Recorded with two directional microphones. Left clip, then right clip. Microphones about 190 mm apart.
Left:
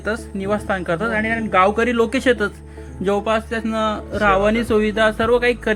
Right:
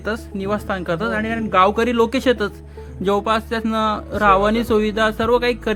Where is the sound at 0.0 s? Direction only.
Centre (ahead or behind).